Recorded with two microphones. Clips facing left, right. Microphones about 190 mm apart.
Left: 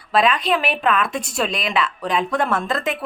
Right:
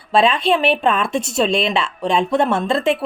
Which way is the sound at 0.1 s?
25° right (ahead or behind).